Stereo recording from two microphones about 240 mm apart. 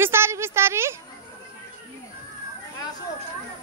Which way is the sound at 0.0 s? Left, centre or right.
Centre.